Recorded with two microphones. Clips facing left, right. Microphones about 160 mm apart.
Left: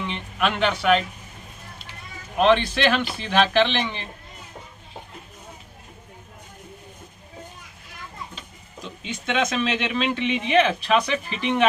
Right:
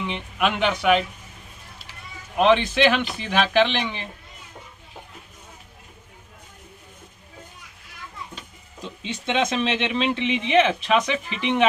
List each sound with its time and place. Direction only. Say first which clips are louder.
0.0 s speech: right 1 dB; 15° right (ahead or behind)
2.4 s speech: right 1 dB; 15° right (ahead or behind)
8.8 s speech: right 1 dB; 30° right (ahead or behind)